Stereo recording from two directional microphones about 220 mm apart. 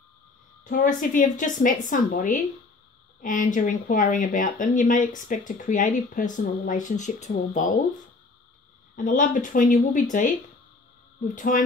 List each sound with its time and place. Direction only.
0.7 s speech: 40° left (ahead or behind)
8.9 s speech: 35° left (ahead or behind)
11.2 s speech: 35° left (ahead or behind)